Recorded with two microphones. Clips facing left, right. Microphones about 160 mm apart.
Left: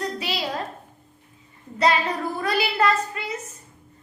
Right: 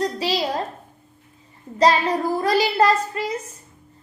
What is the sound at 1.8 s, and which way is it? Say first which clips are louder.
A woman's voice: right 4 dB; 35° right (ahead or behind).